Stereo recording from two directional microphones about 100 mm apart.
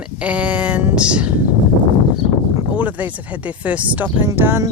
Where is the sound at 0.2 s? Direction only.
15° right (ahead or behind).